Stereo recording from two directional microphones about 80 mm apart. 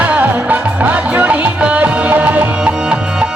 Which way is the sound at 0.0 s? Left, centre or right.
Centre.